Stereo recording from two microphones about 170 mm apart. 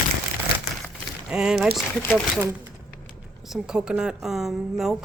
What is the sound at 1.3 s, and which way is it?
Speech, 5° right (ahead or behind).